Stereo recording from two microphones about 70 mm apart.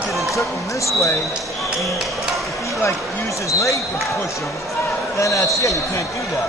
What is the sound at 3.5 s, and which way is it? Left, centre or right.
Speech, left.